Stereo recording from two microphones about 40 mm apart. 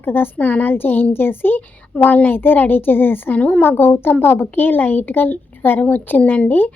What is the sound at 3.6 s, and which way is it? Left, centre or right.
Speech, left.